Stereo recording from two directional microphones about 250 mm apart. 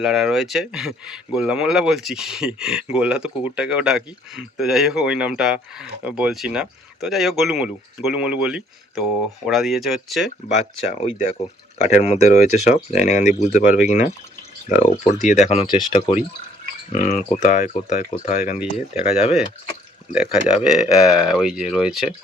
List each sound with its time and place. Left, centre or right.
0.0 s speech: centre
10.8 s speech: left
20.1 s speech: centre